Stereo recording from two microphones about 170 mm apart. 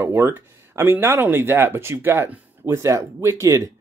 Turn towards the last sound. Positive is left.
turn(degrees=-15)  # may be behind; listen again after turning